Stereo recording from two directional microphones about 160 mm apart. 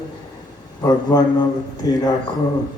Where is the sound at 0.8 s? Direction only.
25° left (ahead or behind).